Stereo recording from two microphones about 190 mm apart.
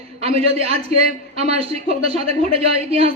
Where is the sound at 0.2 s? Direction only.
30° right (ahead or behind).